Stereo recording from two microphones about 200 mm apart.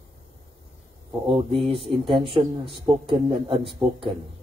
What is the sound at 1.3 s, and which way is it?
Speech, 25° right (ahead or behind).